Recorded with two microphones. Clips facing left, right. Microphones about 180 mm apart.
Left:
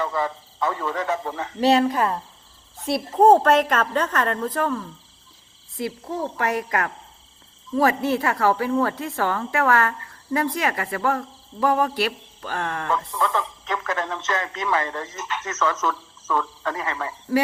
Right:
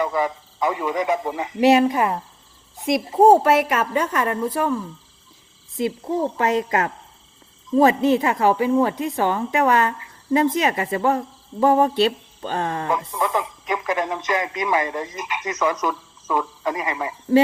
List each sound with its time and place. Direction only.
0.0 s a woman's voice: 15° right (ahead or behind)